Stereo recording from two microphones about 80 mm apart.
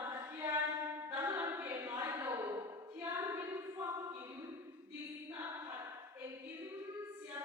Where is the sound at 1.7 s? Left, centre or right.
Right.